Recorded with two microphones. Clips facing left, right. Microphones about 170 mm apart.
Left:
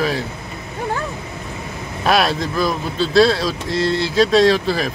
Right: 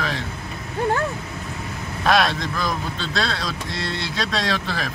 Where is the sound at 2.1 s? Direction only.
5° left (ahead or behind).